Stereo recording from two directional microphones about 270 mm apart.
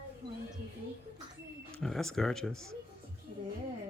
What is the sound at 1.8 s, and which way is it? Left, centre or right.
Speech, centre.